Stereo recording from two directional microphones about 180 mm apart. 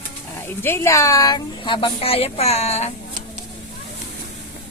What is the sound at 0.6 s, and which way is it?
A woman's voice, 15° left (ahead or behind).